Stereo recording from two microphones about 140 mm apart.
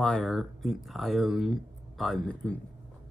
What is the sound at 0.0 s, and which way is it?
Speech, centre (ahead or behind).